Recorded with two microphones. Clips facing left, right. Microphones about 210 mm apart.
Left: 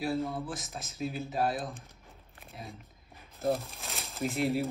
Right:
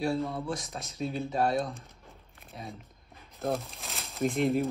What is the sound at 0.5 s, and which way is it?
Speech, centre (ahead or behind).